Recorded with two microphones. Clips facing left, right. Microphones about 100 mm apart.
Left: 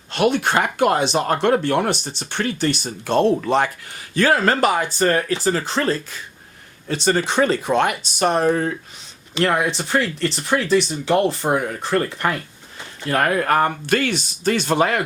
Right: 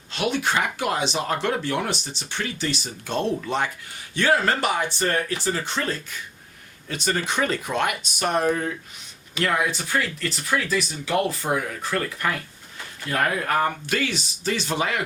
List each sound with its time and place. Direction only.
0.1 s speech: 55° left (ahead or behind); by 3.7 s 80° left
4.3 s speech: 50° left (ahead or behind)
6.8 s speech: 30° left (ahead or behind)
13.1 s speech: 55° left (ahead or behind)